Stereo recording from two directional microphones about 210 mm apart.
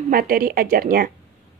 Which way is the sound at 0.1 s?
45° right (ahead or behind).